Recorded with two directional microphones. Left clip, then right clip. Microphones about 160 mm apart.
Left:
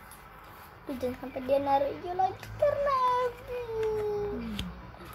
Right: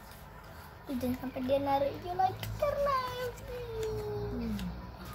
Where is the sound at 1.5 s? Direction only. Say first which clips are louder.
Left 3 dB; 30° left (ahead or behind).